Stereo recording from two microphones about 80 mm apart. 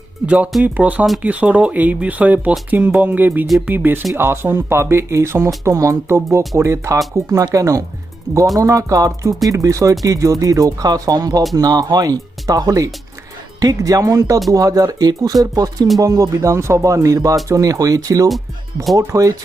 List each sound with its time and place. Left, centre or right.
0.3 s speech: centre; by 19.3 s right